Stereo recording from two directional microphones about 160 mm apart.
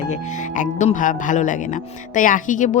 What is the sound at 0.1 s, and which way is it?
A woman's voice, 50° left (ahead or behind).